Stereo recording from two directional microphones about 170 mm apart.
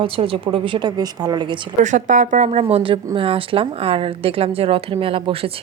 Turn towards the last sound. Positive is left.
turn(degrees=-35)  # may be behind; listen again after turning